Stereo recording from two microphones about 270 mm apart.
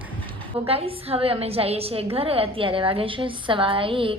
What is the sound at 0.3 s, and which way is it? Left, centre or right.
A woman's voice, centre.